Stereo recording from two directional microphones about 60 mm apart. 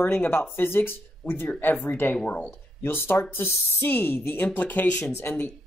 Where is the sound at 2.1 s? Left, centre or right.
Left.